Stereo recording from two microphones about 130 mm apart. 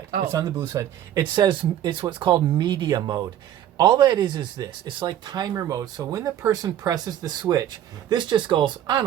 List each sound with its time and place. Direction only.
0.3 s speech: 25° right (ahead or behind)